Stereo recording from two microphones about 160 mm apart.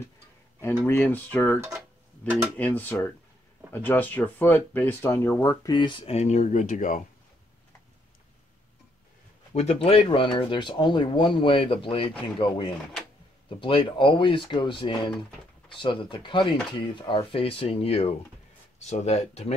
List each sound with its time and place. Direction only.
0.8 s speech: 10° left (ahead or behind); by 7.0 s 55° left (ahead or behind)
9.5 s speech: 45° left (ahead or behind)